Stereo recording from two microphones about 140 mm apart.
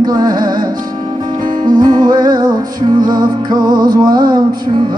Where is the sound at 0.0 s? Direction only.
30° right (ahead or behind).